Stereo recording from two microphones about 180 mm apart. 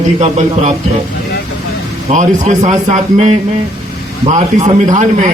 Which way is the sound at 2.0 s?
40° right (ahead or behind).